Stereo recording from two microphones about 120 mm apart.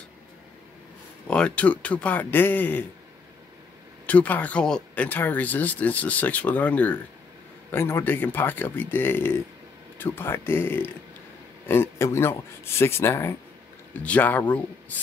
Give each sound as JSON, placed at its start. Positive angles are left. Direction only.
{"t": 1.2, "sound": "speech", "side_deg": 10}
{"t": 4.0, "sound": "speech", "side_deg": 10}